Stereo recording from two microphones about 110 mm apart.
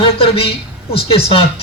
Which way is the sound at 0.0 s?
60° left (ahead or behind).